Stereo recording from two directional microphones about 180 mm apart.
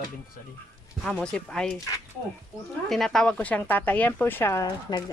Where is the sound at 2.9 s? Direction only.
Centre (ahead or behind).